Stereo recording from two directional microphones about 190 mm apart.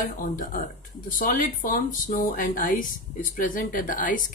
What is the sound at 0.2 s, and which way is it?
Speech, 45° left (ahead or behind).